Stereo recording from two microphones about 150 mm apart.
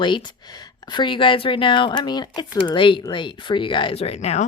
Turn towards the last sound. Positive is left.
turn(degrees=45)  # may be behind; listen again after turning